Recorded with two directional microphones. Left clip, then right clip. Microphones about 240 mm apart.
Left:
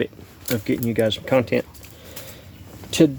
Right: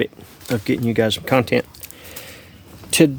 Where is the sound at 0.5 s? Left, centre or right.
Right.